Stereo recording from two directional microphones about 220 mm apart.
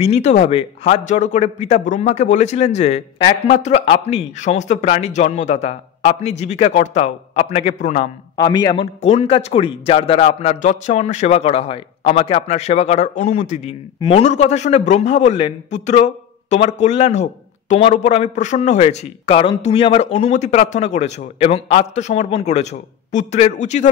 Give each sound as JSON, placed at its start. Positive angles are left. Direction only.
{"t": 0.0, "sound": "a man's voice", "side_deg": 30}
{"t": 8.4, "sound": "a man's voice", "side_deg": 20}